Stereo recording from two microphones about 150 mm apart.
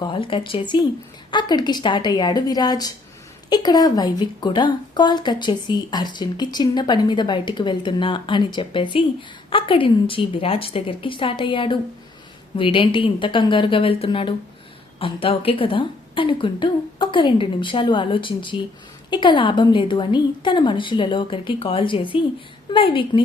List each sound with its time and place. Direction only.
0.0 s a woman's voice: 35° left (ahead or behind)